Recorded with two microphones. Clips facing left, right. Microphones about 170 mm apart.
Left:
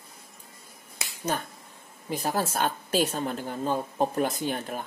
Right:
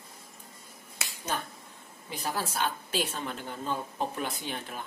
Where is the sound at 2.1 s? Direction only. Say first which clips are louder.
Left 5 dB; 45° left (ahead or behind).